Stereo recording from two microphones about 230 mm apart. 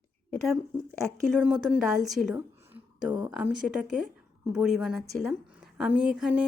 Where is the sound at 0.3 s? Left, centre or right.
Centre.